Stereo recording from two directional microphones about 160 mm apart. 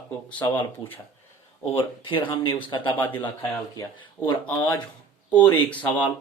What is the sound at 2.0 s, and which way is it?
Speech, 30° left (ahead or behind).